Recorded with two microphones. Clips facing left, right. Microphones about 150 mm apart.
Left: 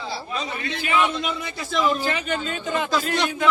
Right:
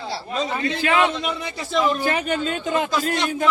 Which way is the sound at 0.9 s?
70° right (ahead or behind).